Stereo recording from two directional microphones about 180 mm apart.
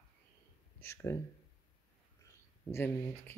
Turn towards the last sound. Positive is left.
turn(degrees=15)  # may be behind; listen again after turning